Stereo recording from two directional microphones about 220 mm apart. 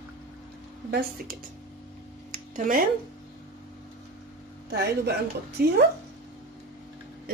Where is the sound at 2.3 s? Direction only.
35° right (ahead or behind).